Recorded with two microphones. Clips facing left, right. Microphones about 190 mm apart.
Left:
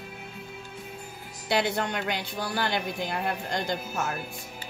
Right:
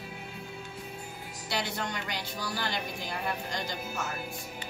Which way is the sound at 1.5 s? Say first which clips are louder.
Left 7 dB; 60° left (ahead or behind).